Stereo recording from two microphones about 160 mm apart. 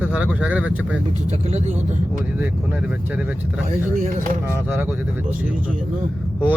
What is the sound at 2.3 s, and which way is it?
Speech, 10° right (ahead or behind).